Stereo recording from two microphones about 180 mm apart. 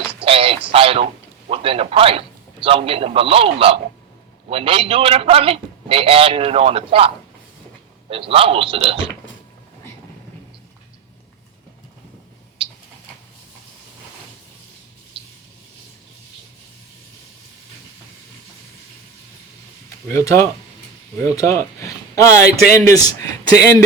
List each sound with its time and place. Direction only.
0.2 s a sound: 30° right (ahead or behind)
1.5 s a man's voice: 30° right (ahead or behind)
8.1 s a man's voice: 30° right (ahead or behind)
20.1 s speech: 15° left (ahead or behind)